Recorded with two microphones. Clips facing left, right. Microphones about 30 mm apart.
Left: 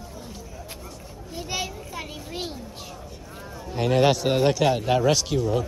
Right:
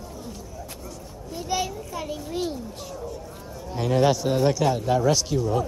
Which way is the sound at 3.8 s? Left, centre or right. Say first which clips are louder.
Left 1 dB; left.